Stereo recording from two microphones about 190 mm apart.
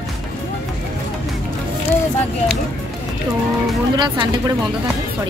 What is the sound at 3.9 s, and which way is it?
Speech, 25° right (ahead or behind).